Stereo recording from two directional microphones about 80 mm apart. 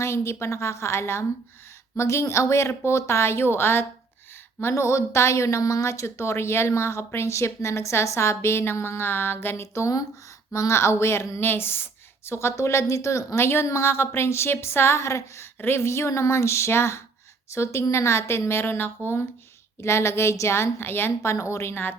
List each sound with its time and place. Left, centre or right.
0.0 s speech: left